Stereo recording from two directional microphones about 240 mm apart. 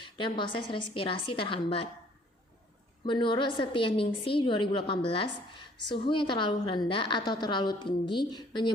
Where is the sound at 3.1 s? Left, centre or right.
Centre.